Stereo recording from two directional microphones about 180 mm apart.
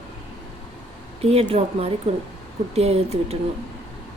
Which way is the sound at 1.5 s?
35° right (ahead or behind).